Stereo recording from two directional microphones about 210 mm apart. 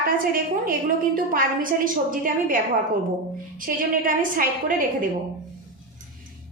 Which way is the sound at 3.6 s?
40° right (ahead or behind).